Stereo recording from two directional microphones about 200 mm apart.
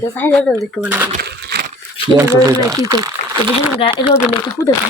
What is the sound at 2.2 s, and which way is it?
Speech, 15° right (ahead or behind).